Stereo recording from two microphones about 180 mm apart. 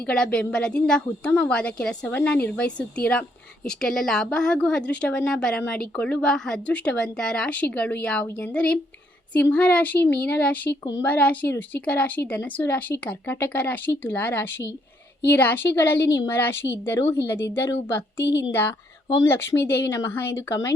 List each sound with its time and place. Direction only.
0.0 s a woman's voice: 5° left (ahead or behind)
18.2 s speech: 80° left
19.2 s a woman's voice: 15° left (ahead or behind)